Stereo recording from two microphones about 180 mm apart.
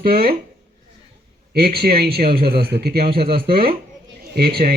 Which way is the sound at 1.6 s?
55° right (ahead or behind).